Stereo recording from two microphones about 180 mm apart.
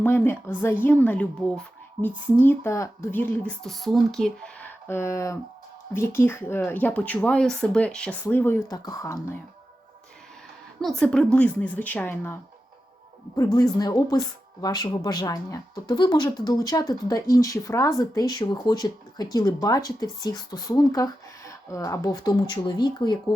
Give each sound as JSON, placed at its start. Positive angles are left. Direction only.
{"t": 0.0, "sound": "speech", "side_deg": 10}
{"t": 10.8, "sound": "speech", "side_deg": 0}